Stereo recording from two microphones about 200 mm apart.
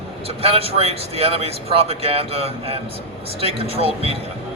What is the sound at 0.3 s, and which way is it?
Speech, 30° right (ahead or behind).